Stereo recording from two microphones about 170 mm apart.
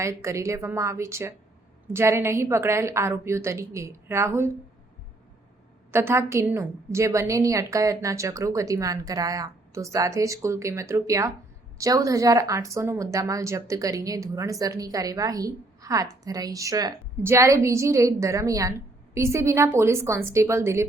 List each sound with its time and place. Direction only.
0.0 s a woman's voice: 15° right (ahead or behind)
5.9 s a woman's voice: 15° right (ahead or behind)